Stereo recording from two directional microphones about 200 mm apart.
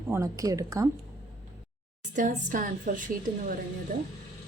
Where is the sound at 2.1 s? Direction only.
40° right (ahead or behind).